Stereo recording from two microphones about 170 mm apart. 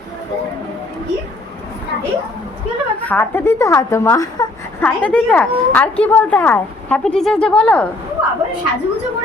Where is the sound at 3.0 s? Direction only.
10° left (ahead or behind).